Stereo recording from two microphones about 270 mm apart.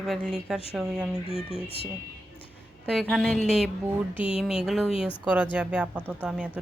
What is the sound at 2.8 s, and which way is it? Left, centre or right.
A woman's voice, centre.